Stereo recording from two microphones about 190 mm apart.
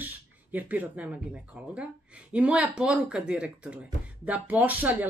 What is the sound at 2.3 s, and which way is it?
Speech, 5° right (ahead or behind).